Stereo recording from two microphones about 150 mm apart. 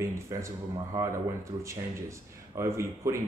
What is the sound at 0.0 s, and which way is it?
Speech, 20° right (ahead or behind).